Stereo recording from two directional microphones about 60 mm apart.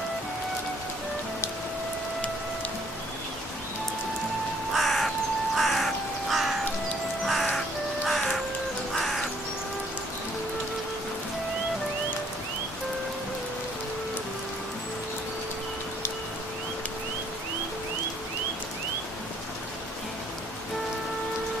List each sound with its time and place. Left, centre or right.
4.7 s crow: centre
7.2 s music: centre
8.1 s crow: centre